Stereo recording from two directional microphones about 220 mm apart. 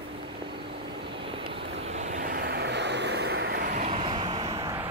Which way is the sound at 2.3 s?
50° right (ahead or behind).